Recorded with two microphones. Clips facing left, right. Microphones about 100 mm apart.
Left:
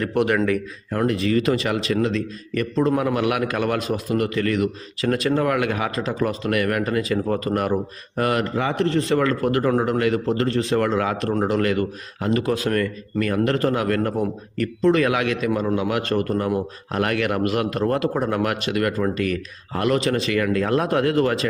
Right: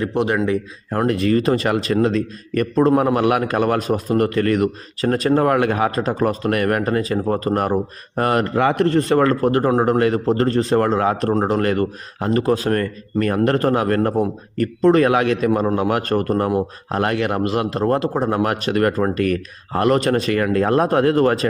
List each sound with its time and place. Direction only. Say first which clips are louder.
0.0 s a man's voice: right 1 dB; 25° right (ahead or behind)
0.9 s a man's voice: right 3 dB; 40° right (ahead or behind)
8.5 s a man's voice: right 5 dB; 55° right (ahead or behind)
16.9 s a man's voice: right 2 dB; 30° right (ahead or behind)